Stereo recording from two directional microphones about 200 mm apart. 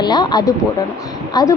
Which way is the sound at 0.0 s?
20° left (ahead or behind).